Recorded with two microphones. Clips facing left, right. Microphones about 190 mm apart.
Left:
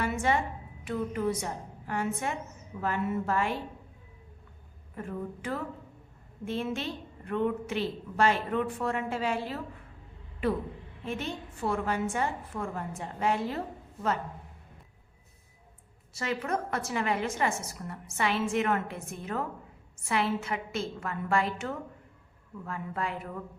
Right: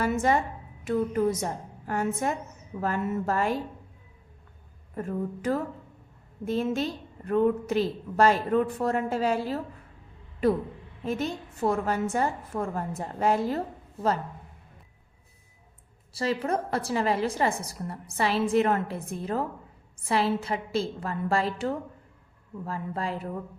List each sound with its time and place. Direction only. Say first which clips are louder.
0.0 s a sound: right 4 dB; 40° right (ahead or behind)
0.9 s a woman's voice: right 5 dB; 45° right (ahead or behind)
4.9 s a woman's voice: right 5 dB; 40° right (ahead or behind)
16.1 s a woman's voice: right 4 dB; 30° right (ahead or behind)